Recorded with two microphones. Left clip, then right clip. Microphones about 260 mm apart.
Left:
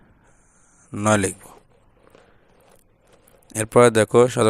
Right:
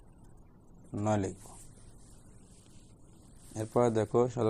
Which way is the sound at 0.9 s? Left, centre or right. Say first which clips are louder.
Left 12 dB; left.